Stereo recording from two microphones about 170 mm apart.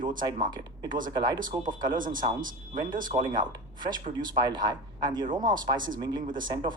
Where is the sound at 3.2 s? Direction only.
25° right (ahead or behind).